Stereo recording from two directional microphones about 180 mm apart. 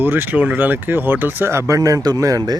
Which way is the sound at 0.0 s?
10° right (ahead or behind).